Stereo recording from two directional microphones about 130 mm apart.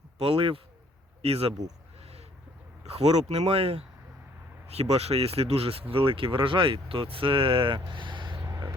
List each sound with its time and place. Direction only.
0.2 s speech: 45° right (ahead or behind)
2.8 s speech: 55° right (ahead or behind); by 8.7 s 35° right (ahead or behind)